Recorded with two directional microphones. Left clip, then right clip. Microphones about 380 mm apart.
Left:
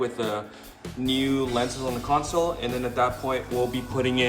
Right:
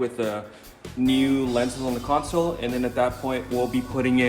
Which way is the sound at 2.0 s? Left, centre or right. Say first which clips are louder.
Even; centre.